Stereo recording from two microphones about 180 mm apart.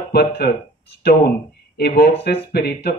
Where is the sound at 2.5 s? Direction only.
65° left (ahead or behind).